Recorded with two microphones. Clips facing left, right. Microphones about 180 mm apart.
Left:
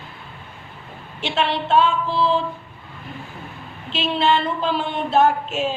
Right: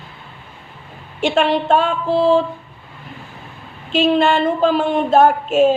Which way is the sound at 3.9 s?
50° right (ahead or behind).